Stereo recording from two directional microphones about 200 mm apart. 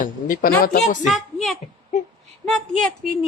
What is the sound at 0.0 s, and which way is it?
Speech, 45° left (ahead or behind).